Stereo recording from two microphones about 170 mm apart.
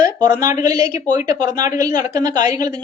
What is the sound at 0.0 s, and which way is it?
Speech, 20° right (ahead or behind).